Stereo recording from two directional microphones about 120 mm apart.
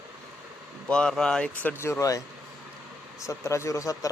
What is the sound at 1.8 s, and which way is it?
Speech, 25° left (ahead or behind).